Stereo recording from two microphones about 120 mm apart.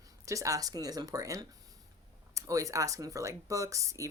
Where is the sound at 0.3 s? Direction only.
25° right (ahead or behind).